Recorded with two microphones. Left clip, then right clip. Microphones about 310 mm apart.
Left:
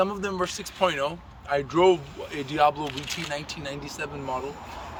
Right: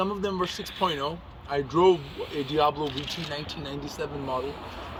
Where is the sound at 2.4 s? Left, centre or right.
Centre.